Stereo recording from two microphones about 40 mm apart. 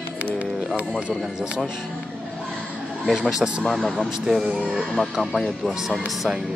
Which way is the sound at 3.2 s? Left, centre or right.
Centre.